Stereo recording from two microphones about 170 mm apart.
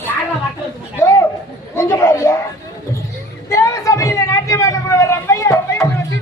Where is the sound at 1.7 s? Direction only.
15° left (ahead or behind).